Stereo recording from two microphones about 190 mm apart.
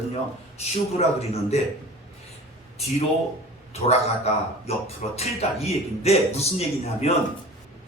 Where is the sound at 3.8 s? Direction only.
35° left (ahead or behind).